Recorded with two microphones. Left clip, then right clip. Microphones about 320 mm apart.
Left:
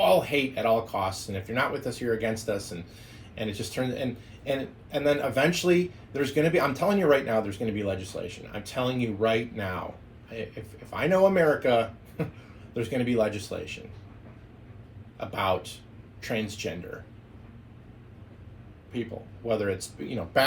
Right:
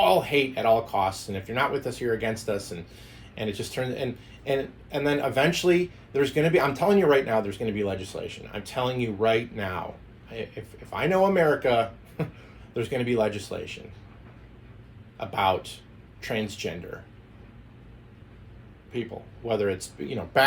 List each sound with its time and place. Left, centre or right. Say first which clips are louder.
0.0 s a man's voice: right 1 dB; centre
15.2 s a man's voice: right 3 dB; centre
19.5 s a man's voice: right 2 dB; centre